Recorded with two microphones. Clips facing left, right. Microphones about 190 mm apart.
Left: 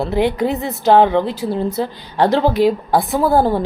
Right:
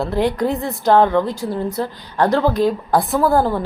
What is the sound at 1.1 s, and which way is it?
Speech, 25° left (ahead or behind).